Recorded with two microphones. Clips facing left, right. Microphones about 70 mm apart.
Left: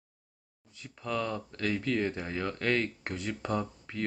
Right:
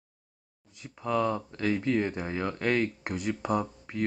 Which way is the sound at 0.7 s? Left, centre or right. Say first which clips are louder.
Right 5 dB; right.